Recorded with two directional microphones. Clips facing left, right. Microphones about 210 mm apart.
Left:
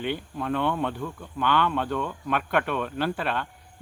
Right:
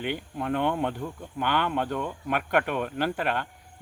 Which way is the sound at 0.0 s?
15° right (ahead or behind).